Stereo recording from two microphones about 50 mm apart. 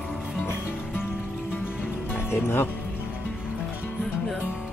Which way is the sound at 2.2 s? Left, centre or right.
Left.